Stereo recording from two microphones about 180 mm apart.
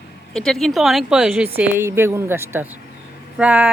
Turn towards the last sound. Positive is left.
turn(degrees=-10)  # may be behind; listen again after turning